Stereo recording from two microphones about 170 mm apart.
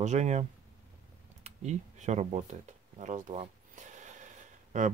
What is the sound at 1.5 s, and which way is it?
Speech, 40° right (ahead or behind).